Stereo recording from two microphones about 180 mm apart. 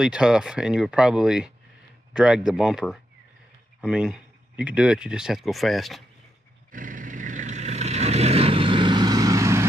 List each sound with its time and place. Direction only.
0.0 s speech: 5° right (ahead or behind)
6.7 s vehicle: 50° right (ahead or behind); by 9.7 s 15° right (ahead or behind)